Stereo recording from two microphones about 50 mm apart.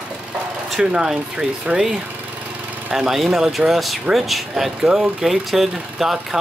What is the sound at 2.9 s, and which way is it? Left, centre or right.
Speech, centre.